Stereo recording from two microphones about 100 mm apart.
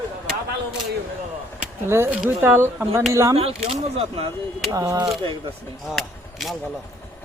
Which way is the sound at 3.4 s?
75° right (ahead or behind).